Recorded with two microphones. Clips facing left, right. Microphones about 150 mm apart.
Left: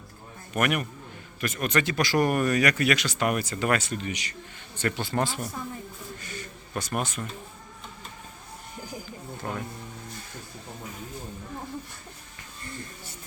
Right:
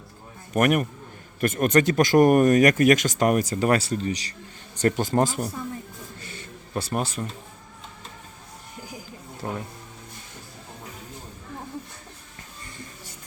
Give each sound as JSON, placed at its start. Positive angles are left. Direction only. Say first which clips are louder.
{"t": 0.5, "sound": "a man's voice", "louder": "right 6 dB", "side_deg": -40}
{"t": 6.2, "sound": "a sound", "louder": "left 1 dB", "side_deg": -30}
{"t": 9.4, "sound": "speech", "louder": "right 2 dB", "side_deg": -25}